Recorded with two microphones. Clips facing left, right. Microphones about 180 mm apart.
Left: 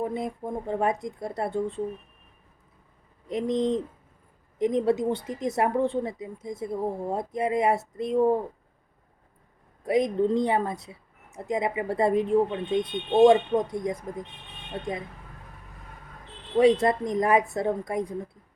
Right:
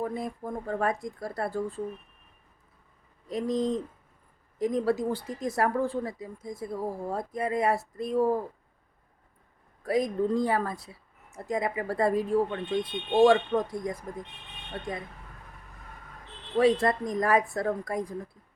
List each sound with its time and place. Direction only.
0.0 s speech: 25° left (ahead or behind)
3.2 s speech: 20° left (ahead or behind)
9.8 s speech: 20° left (ahead or behind)
16.6 s speech: 20° left (ahead or behind)